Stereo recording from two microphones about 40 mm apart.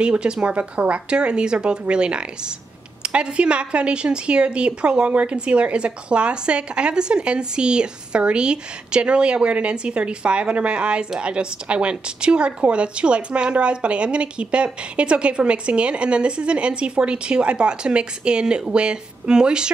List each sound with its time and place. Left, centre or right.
0.0 s speech: right